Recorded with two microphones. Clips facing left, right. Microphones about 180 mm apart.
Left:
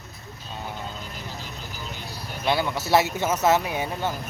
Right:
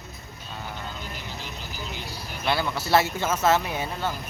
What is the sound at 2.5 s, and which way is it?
Speech, 15° left (ahead or behind).